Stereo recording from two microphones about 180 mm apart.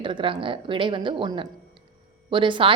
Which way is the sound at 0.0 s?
25° right (ahead or behind).